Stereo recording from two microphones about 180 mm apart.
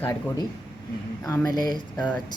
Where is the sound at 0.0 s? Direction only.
20° left (ahead or behind).